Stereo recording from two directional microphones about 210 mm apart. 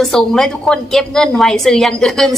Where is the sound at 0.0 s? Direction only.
Centre (ahead or behind).